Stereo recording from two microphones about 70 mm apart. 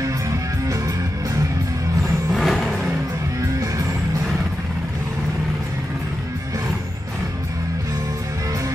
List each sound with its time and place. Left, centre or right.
0.0 s music: right
2.3 s vehicle: centre